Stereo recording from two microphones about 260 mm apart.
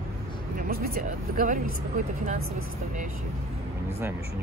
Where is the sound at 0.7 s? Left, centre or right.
Right.